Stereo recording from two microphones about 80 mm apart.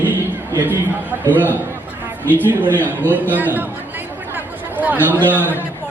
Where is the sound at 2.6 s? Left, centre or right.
Right.